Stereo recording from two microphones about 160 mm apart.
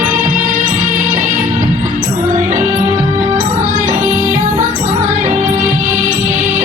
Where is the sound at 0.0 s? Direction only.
55° right (ahead or behind).